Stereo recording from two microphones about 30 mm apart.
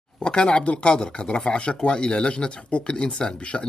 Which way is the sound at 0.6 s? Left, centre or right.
Left.